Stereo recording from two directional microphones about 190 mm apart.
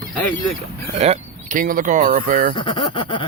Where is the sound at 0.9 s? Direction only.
35° right (ahead or behind).